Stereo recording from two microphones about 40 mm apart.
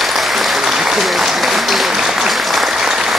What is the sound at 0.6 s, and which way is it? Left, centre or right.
Applause, centre.